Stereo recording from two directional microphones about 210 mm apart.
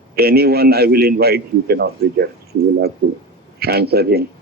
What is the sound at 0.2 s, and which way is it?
A man's voice, 50° right (ahead or behind).